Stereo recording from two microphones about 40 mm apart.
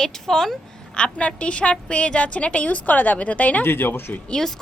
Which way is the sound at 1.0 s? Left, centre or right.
Left.